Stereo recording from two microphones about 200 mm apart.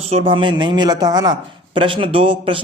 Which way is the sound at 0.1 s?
25° right (ahead or behind).